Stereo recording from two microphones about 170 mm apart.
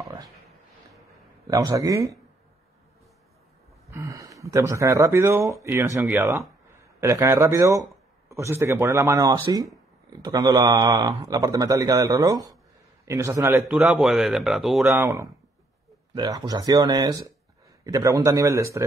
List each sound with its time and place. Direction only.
1.5 s speech: 20° right (ahead or behind)
3.9 s a man's voice: 20° right (ahead or behind)
13.7 s speech: 5° right (ahead or behind)
14.9 s speech: 20° right (ahead or behind)